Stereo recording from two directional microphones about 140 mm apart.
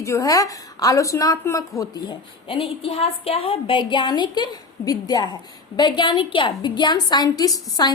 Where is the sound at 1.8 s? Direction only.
35° left (ahead or behind).